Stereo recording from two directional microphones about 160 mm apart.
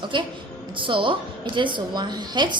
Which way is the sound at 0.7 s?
30° right (ahead or behind).